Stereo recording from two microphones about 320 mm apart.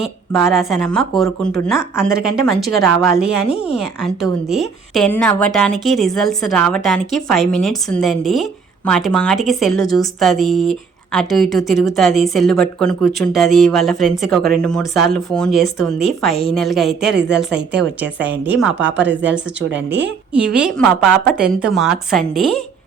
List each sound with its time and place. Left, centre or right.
0.0 s a woman's voice: centre
17.2 s a woman's voice: right
17.5 s a woman's voice: centre